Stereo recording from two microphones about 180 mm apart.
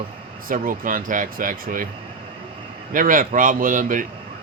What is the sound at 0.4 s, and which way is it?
Speech, 50° right (ahead or behind).